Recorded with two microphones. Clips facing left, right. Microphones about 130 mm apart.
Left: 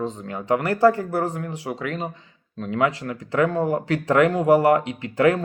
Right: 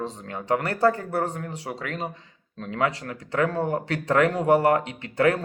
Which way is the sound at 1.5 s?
35° right (ahead or behind).